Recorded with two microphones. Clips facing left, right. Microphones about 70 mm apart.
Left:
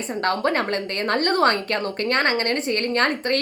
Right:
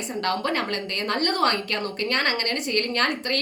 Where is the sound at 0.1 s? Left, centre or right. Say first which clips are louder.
Left 4 dB; left.